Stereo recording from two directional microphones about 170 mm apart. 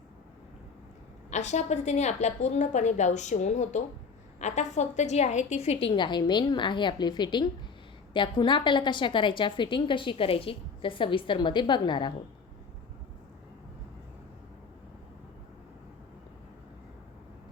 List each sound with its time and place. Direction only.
1.3 s a woman's voice: 45° left (ahead or behind); by 12.1 s 25° left (ahead or behind)